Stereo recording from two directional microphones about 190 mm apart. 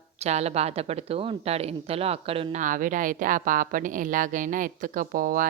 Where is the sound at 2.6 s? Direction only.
45° right (ahead or behind).